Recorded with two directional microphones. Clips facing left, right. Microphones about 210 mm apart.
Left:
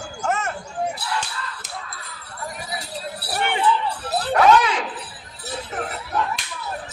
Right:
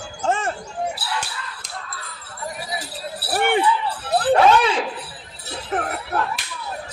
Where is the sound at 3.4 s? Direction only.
50° right (ahead or behind).